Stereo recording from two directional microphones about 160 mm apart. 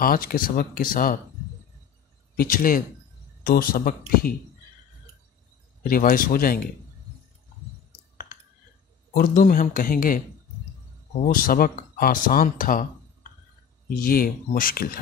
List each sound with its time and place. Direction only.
0.0 s speech: 65° left (ahead or behind)
2.3 s speech: 65° left (ahead or behind)
5.9 s speech: 60° left (ahead or behind)
9.1 s speech: 60° left (ahead or behind)
11.2 s speech: 65° left (ahead or behind)
14.0 s speech: 65° left (ahead or behind)